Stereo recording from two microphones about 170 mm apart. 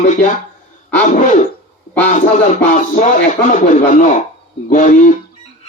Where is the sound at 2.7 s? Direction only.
50° left (ahead or behind).